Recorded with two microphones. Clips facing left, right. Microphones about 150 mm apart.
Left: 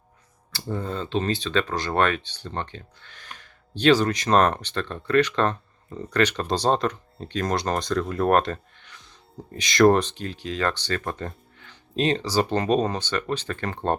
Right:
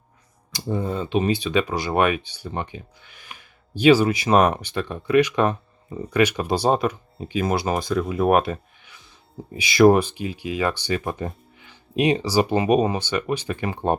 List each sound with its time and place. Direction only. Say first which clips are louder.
0.5 s speech: right 4 dB; 15° right (ahead or behind)